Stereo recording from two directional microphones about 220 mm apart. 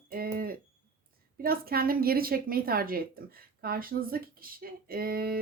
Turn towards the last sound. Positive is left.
turn(degrees=-45)  # may be behind; listen again after turning